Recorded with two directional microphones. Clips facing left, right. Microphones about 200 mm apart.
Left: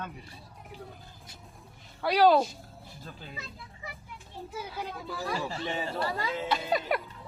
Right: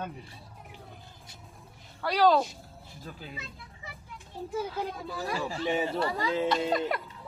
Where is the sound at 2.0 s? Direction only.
15° left (ahead or behind).